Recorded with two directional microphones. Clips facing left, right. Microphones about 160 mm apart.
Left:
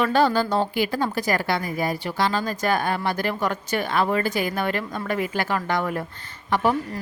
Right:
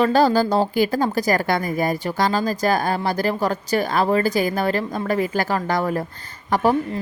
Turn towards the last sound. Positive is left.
turn(degrees=-40)  # may be behind; listen again after turning